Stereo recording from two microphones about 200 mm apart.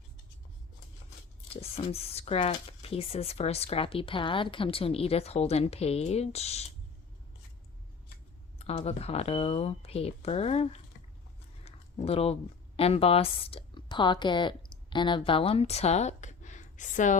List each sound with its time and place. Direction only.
1.7 s speech: 30° left (ahead or behind)
8.5 s speech: 30° left (ahead or behind)